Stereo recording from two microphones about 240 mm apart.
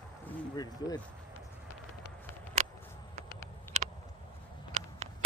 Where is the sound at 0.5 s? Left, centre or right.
Centre.